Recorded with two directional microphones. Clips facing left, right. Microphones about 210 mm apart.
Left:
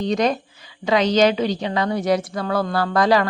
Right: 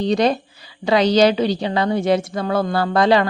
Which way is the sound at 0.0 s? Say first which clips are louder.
Right 3 dB; 30° right (ahead or behind).